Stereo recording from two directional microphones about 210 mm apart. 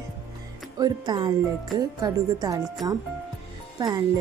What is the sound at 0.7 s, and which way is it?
Music, 20° right (ahead or behind).